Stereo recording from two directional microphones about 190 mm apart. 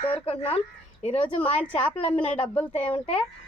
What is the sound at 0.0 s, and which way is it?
Speech, 30° left (ahead or behind).